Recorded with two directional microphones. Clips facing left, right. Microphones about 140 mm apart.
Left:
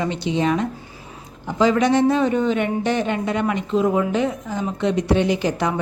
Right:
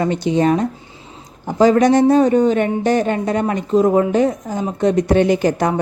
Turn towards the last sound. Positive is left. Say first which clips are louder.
# right 5 dB
turn(degrees=-45)  # may be behind; listen again after turning